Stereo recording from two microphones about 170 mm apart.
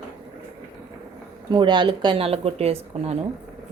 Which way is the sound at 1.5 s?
25° right (ahead or behind).